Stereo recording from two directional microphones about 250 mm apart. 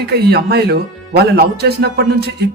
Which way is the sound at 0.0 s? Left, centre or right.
Right.